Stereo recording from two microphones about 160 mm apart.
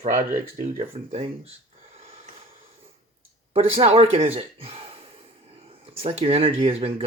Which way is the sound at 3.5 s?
40° right (ahead or behind).